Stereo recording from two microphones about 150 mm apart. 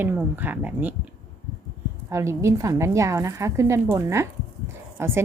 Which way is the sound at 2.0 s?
20° right (ahead or behind).